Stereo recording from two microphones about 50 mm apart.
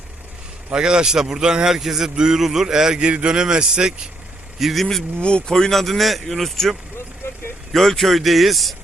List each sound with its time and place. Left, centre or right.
0.7 s a man's voice: centre
4.6 s speech: centre
5.2 s speech: centre